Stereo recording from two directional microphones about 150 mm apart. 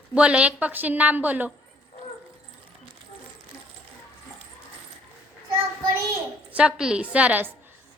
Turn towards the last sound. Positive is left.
turn(degrees=-10)  # may be behind; listen again after turning